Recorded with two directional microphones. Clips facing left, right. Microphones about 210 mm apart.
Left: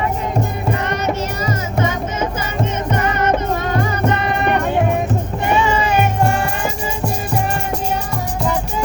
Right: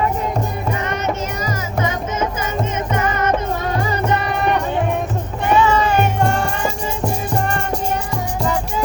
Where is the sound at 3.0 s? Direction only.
65° left (ahead or behind).